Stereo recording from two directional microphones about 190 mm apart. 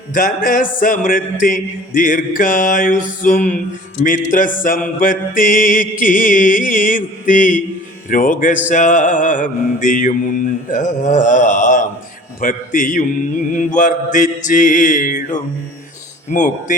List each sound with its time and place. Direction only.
0.1 s mantra: 45° left (ahead or behind)
16.3 s speech: 40° left (ahead or behind)